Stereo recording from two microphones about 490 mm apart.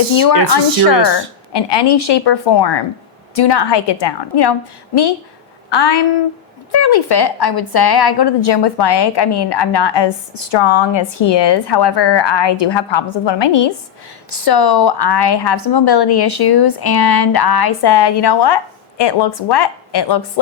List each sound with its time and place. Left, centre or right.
0.5 s a woman's voice: left
5.7 s a woman's voice: left
10.5 s a woman's voice: left
14.3 s a woman's voice: left
19.5 s a woman's voice: left